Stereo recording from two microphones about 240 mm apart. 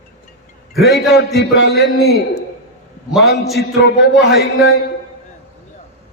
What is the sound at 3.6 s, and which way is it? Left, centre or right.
A man's voice, left.